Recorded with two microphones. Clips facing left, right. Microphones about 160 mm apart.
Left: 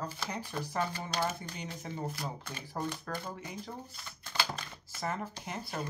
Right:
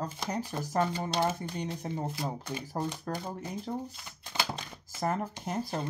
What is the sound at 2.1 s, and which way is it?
Shuffling cards, 15° right (ahead or behind).